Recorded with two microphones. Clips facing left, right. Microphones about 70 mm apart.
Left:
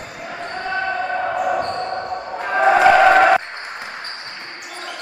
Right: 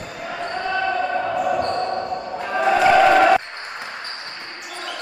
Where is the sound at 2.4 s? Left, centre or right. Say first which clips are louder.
Left 4 dB; left.